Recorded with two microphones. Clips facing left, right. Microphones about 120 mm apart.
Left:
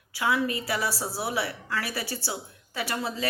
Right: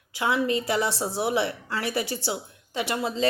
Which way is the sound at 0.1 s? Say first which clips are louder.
Right 2 dB; 20° right (ahead or behind).